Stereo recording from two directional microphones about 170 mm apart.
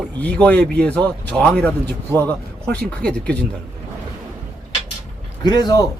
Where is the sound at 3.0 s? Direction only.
5° left (ahead or behind).